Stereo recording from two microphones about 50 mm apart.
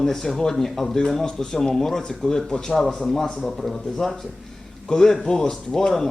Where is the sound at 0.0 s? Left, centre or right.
Centre.